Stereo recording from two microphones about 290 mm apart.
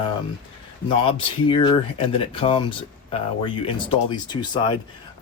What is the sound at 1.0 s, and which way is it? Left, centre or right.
Speech, centre.